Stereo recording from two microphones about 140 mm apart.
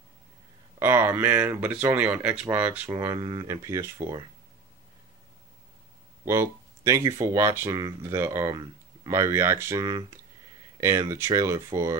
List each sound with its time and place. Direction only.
0.7 s speech: 15° right (ahead or behind)
6.2 s speech: 20° right (ahead or behind)